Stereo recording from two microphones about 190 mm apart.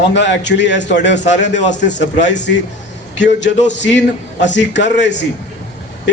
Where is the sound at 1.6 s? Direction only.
40° left (ahead or behind).